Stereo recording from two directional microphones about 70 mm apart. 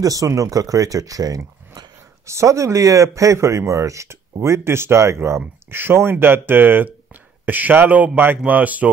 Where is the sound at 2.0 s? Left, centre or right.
Right.